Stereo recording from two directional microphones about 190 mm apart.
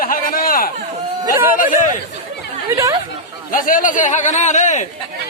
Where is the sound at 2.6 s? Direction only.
15° right (ahead or behind).